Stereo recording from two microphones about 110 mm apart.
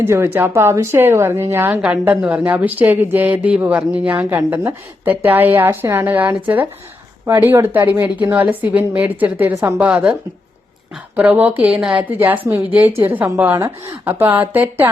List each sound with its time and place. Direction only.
0.0 s a woman's voice: 20° right (ahead or behind)
9.6 s speech: 25° right (ahead or behind)
9.8 s a woman's voice: 10° right (ahead or behind)